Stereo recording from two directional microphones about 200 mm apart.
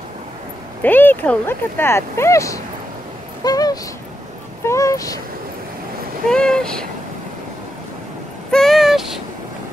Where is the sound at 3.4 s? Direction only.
20° left (ahead or behind).